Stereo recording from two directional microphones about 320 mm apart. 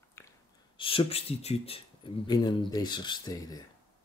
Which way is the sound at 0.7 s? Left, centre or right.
Centre.